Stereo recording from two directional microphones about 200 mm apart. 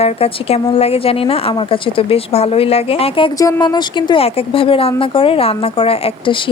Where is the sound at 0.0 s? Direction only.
30° left (ahead or behind).